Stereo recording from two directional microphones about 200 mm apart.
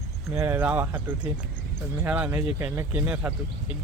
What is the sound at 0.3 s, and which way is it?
Speech, 10° right (ahead or behind).